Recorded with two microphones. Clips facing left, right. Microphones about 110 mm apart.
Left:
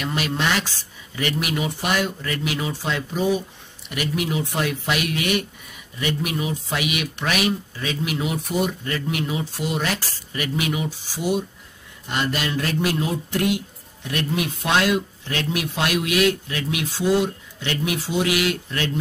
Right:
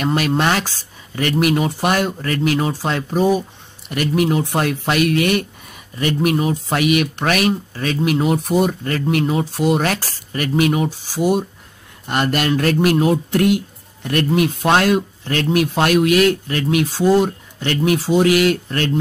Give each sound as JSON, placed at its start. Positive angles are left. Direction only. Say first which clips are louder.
{"t": 0.0, "sound": "speech", "louder": "right 7 dB", "side_deg": -45}